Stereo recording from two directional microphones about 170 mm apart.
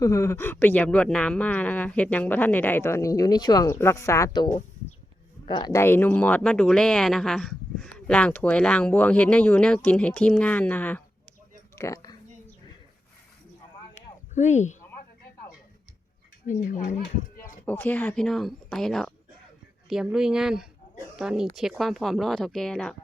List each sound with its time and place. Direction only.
0.0 s speech: 15° left (ahead or behind)
5.8 s speech: 10° left (ahead or behind)
13.9 s a sound: 45° left (ahead or behind)
16.5 s speech: 50° left (ahead or behind)
17.3 s a sound: 55° left (ahead or behind)
17.7 s speech: 10° left (ahead or behind)